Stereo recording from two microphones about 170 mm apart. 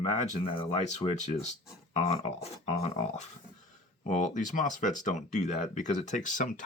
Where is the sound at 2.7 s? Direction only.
40° left (ahead or behind).